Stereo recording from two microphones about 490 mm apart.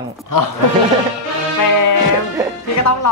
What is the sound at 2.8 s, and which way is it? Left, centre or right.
Speech, left.